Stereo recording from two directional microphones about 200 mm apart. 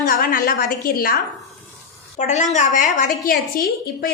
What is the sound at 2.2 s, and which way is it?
Speech, 35° left (ahead or behind).